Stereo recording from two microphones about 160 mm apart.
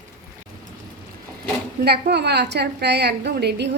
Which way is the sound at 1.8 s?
90° right.